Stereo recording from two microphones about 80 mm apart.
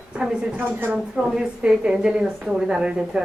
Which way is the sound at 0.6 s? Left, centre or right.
Right.